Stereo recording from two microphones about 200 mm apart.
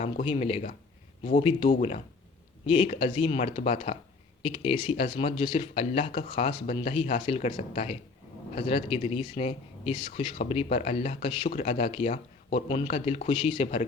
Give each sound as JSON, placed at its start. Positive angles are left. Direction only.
{"t": 0.0, "sound": "speech", "side_deg": 30}